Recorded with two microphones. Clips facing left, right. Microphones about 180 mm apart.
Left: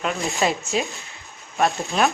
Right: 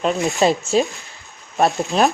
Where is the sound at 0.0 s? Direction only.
35° right (ahead or behind).